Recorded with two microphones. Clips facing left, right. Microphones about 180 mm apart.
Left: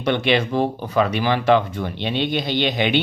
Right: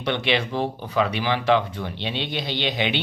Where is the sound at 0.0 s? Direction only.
45° left (ahead or behind).